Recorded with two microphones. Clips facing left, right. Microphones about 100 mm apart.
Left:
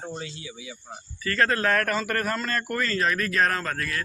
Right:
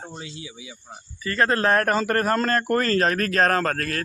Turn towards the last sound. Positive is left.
turn(degrees=-50)  # may be behind; listen again after turning